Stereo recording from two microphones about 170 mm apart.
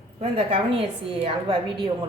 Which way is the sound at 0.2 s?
35° right (ahead or behind).